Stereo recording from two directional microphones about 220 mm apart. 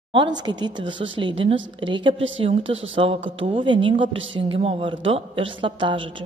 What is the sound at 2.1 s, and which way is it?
Speech, 60° right (ahead or behind).